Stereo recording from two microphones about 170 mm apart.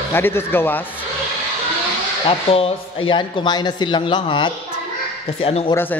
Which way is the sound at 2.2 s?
35° left (ahead or behind).